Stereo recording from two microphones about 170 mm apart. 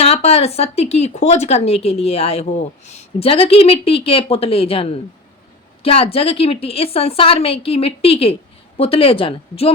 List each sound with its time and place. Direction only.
0.0 s speech: 35° left (ahead or behind)